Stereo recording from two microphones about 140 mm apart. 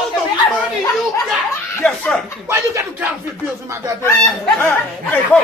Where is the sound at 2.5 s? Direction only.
20° right (ahead or behind).